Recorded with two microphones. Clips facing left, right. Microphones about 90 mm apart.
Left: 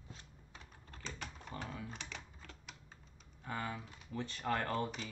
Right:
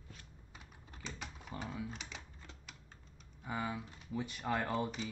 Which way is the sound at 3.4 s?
10° right (ahead or behind).